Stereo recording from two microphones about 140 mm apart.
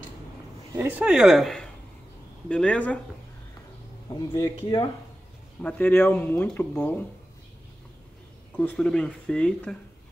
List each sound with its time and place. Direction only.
0.7 s speech: 10° right (ahead or behind); by 3.0 s 10° left (ahead or behind)
4.1 s speech: 25° left (ahead or behind)
5.6 s speech: 10° left (ahead or behind)
8.5 s speech: 5° left (ahead or behind)